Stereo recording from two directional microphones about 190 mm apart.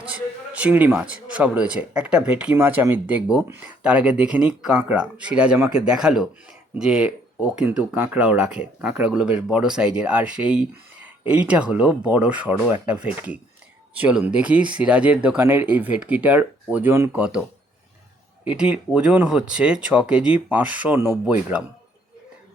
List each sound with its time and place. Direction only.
0.1 s a man's voice: 5° right (ahead or behind)
18.4 s a man's voice: 5° right (ahead or behind)